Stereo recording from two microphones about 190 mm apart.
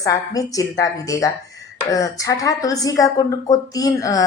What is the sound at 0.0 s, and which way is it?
A woman's voice, 20° left (ahead or behind).